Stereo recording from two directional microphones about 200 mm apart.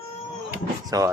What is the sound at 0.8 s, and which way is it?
Speech, 15° right (ahead or behind).